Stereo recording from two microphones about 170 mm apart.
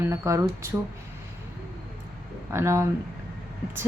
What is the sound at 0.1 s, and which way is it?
Speech, 15° right (ahead or behind).